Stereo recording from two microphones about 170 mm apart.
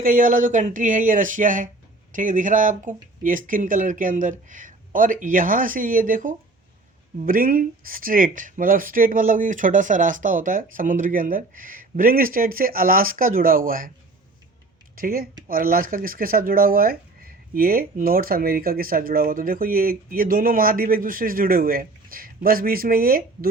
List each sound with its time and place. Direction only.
0.0 s speech: 55° right (ahead or behind)
14.9 s speech: 55° right (ahead or behind)